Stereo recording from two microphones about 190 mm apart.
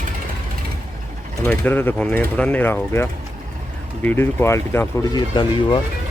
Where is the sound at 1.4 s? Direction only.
10° left (ahead or behind).